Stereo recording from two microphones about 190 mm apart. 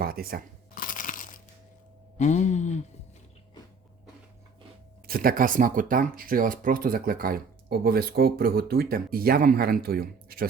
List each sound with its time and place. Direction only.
0.0 s speech: 50° right (ahead or behind)
0.8 s crunch: 45° left (ahead or behind)
2.1 s speech: 40° left (ahead or behind)
5.0 s speech: 50° right (ahead or behind)